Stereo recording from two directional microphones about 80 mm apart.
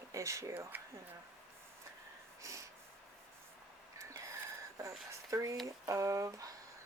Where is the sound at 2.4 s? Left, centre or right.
Right.